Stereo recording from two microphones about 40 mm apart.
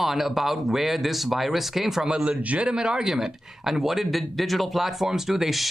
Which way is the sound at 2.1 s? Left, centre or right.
Right.